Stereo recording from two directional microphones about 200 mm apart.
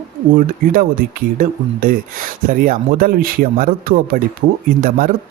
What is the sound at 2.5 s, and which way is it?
Speech, 45° right (ahead or behind).